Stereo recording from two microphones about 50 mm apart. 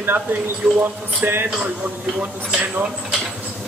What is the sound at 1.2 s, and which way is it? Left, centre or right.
Speech, right.